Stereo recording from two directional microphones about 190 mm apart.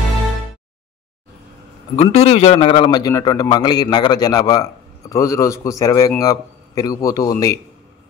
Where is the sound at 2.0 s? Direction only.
35° left (ahead or behind); by 7.5 s 20° left (ahead or behind).